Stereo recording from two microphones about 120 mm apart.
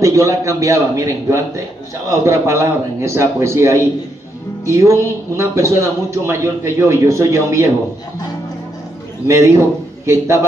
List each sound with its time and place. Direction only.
0.0 s speech: 25° right (ahead or behind)
9.3 s speech: 25° right (ahead or behind)